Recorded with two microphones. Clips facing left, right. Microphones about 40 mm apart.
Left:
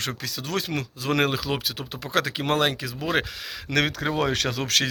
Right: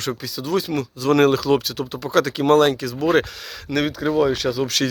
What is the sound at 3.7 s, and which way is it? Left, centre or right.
Speech, left.